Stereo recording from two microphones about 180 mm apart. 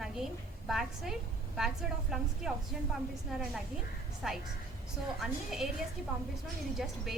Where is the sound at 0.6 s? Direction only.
Centre (ahead or behind).